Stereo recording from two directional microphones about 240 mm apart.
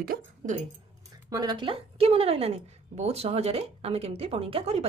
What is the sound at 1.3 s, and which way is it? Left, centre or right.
A woman's voice, centre.